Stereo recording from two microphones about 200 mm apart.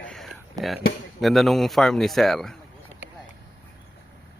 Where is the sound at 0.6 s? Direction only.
20° right (ahead or behind).